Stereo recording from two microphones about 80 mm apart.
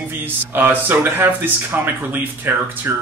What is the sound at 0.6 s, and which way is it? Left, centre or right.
Speech, right.